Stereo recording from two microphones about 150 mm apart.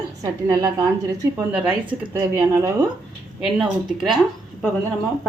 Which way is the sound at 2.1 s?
15° right (ahead or behind).